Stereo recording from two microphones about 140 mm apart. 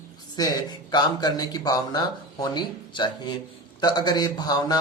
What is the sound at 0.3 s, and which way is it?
A man's voice, 30° left (ahead or behind).